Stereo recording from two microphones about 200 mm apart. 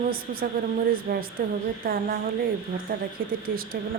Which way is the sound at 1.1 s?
45° right (ahead or behind).